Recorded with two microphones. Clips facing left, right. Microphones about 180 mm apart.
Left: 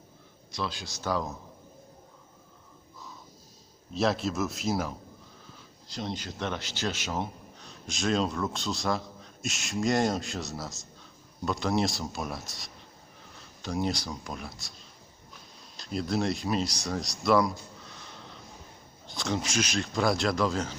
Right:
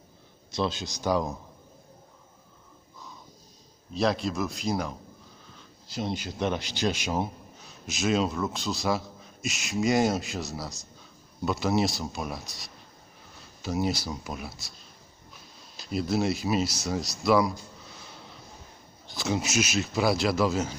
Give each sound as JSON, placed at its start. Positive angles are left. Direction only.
{"t": 0.5, "sound": "speech", "side_deg": -25}
{"t": 3.9, "sound": "speech", "side_deg": 0}
{"t": 5.9, "sound": "speech", "side_deg": -10}
{"t": 15.8, "sound": "speech", "side_deg": -5}
{"t": 19.0, "sound": "speech", "side_deg": -5}